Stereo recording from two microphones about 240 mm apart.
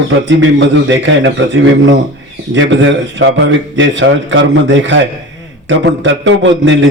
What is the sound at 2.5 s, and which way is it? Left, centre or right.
A man's voice, right.